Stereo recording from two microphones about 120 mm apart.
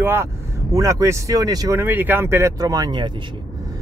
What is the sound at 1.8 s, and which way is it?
Speech, 15° right (ahead or behind).